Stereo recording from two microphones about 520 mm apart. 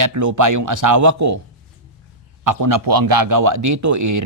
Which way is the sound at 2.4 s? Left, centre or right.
Right.